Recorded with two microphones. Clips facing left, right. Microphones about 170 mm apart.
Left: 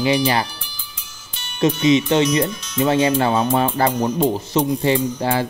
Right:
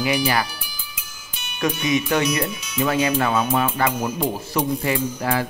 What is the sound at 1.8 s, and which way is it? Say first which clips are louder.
Speech: left 5 dB; 25° left (ahead or behind).